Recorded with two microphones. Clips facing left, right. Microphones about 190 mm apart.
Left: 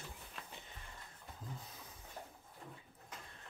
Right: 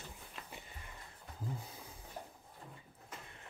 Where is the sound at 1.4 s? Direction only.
5° right (ahead or behind).